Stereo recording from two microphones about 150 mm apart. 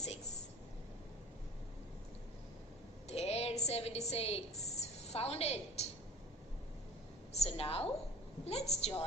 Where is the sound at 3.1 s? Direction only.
45° left (ahead or behind).